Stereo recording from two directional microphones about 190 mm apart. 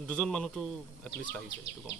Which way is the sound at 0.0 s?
5° left (ahead or behind).